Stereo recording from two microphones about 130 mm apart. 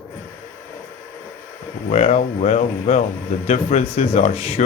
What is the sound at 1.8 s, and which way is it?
Speech, 55° left (ahead or behind).